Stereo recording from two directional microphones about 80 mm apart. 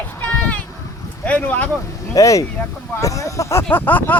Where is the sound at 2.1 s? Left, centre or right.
Left.